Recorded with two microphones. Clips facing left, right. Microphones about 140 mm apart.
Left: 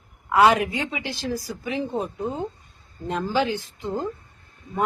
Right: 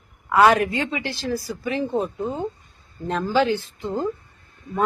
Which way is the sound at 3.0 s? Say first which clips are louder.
Right 3 dB; 15° left (ahead or behind).